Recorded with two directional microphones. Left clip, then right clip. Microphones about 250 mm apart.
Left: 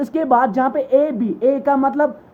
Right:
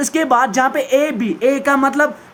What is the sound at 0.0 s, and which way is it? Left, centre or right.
Speech, right.